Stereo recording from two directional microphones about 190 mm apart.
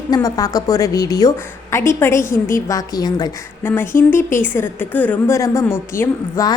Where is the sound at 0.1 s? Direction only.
20° left (ahead or behind).